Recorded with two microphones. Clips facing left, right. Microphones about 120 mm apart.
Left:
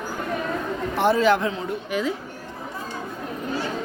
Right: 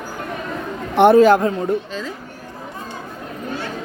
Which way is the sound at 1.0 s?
55° right (ahead or behind).